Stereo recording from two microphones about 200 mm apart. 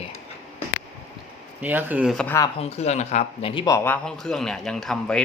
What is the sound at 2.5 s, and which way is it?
Speech, 30° left (ahead or behind).